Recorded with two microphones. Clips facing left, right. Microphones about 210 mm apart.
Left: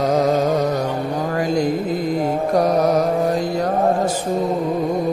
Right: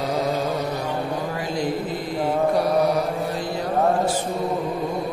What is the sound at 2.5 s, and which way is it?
Music, 45° left (ahead or behind).